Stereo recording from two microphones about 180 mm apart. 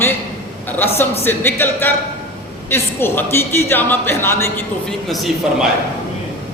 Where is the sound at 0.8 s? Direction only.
10° left (ahead or behind).